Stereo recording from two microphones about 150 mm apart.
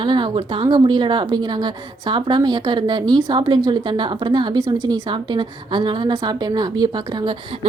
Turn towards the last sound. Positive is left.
turn(degrees=-30)  # may be behind; listen again after turning